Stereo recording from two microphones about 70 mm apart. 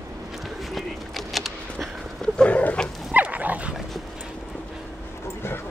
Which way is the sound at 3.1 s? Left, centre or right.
Right.